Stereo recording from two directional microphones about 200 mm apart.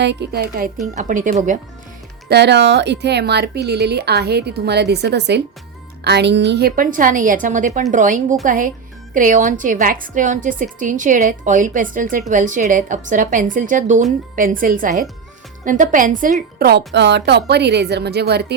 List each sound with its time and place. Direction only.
0.0 s speech: 60° right (ahead or behind)
0.9 s a woman's voice: 40° right (ahead or behind)
2.3 s a woman's voice: 60° right (ahead or behind)